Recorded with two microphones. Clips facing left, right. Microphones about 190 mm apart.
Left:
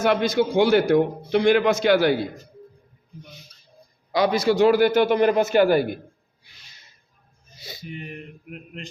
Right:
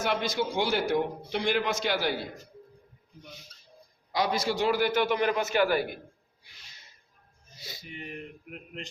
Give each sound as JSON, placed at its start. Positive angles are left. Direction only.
{"t": 0.0, "sound": "a man's voice", "side_deg": 55}
{"t": 4.1, "sound": "a man's voice", "side_deg": 70}
{"t": 7.6, "sound": "speech", "side_deg": 60}